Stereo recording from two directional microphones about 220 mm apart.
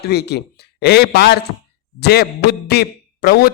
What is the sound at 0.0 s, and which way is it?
Speech, 50° left (ahead or behind).